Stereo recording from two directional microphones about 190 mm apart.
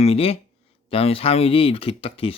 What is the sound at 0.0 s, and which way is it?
Speech, 30° left (ahead or behind).